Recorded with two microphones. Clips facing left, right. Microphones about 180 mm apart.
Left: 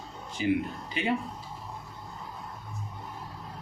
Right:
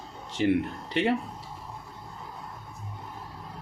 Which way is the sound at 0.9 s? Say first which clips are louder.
Right 4 dB; 75° right (ahead or behind).